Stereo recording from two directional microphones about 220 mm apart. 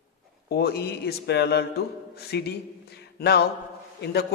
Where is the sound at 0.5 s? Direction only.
45° left (ahead or behind).